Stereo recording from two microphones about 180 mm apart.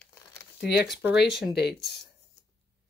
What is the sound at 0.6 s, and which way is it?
Speech, 70° left (ahead or behind).